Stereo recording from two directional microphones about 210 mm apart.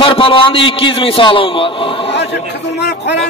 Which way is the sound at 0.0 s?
25° left (ahead or behind).